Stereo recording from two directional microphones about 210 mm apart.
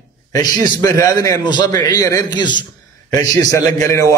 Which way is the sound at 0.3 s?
15° left (ahead or behind).